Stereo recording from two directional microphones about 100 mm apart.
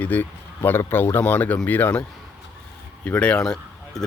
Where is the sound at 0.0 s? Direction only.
20° left (ahead or behind).